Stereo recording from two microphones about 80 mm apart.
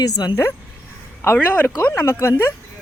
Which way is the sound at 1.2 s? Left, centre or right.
Left.